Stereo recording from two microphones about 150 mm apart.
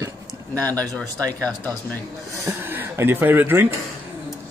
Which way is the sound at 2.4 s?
15° right (ahead or behind).